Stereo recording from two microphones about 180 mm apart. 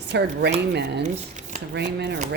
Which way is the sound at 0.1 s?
70° right (ahead or behind).